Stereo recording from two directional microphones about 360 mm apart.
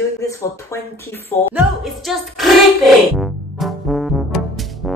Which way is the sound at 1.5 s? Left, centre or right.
Centre.